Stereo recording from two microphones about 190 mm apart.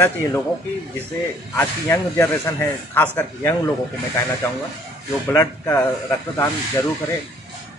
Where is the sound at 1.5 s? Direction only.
15° left (ahead or behind).